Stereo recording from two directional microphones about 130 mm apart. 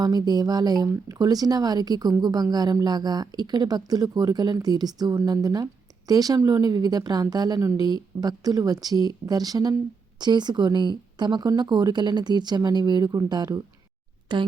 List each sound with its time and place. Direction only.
0.0 s a woman's voice: 30° right (ahead or behind)